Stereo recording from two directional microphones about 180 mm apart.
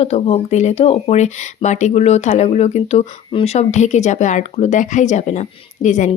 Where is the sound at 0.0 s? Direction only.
35° left (ahead or behind).